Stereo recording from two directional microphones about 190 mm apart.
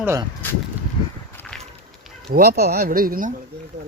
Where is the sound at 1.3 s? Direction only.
5° left (ahead or behind).